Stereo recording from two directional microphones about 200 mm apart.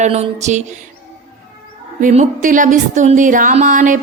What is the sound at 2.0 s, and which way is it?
A woman's voice, 40° right (ahead or behind).